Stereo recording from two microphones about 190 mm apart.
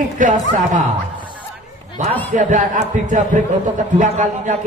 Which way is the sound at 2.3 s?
40° right (ahead or behind).